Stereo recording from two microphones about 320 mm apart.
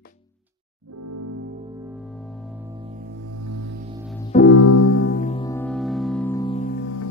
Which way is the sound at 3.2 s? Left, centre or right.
Right.